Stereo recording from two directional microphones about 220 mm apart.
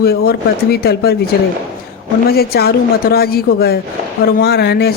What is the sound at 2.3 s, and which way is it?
Speech, 45° left (ahead or behind).